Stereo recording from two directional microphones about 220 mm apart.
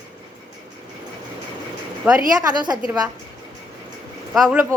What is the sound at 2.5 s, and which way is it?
Speech, 20° right (ahead or behind).